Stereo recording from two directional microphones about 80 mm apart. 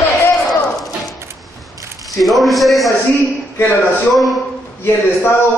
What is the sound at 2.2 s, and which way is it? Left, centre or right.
Speech, centre.